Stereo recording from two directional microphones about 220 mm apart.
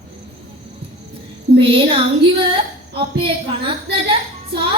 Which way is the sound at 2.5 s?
25° right (ahead or behind).